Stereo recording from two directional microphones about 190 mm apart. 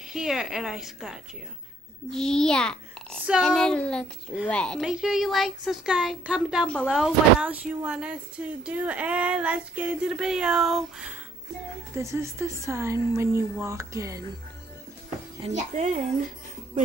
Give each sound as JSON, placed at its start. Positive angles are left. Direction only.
{"t": 0.1, "sound": "speech", "side_deg": 0}
{"t": 12.0, "sound": "speech", "side_deg": -15}
{"t": 15.4, "sound": "speech", "side_deg": -35}